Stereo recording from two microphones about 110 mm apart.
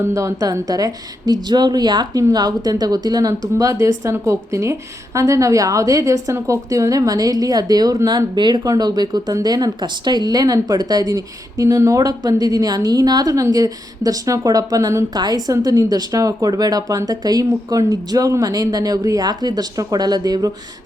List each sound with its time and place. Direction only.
0.0 s a woman's voice: 30° right (ahead or behind)